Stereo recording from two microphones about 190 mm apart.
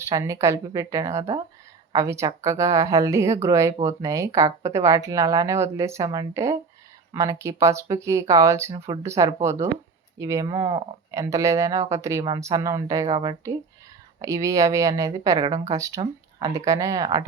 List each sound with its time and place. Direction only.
0.0 s speech: 15° right (ahead or behind)